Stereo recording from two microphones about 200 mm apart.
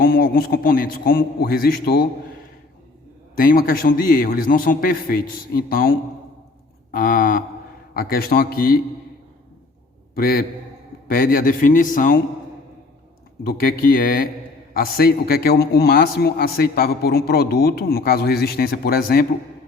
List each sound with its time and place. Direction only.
0.0 s a man's voice: 45° left (ahead or behind)
3.3 s a man's voice: 45° left (ahead or behind)
10.2 s a man's voice: 50° left (ahead or behind)
13.4 s a man's voice: 50° left (ahead or behind)